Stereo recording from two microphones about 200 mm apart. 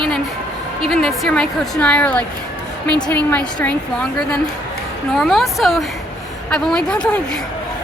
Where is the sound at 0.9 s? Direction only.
Centre (ahead or behind).